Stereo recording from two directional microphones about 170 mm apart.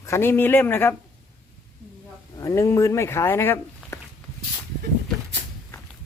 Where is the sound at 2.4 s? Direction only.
20° left (ahead or behind).